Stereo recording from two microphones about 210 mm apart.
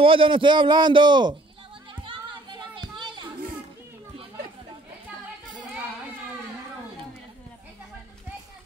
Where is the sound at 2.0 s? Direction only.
25° right (ahead or behind).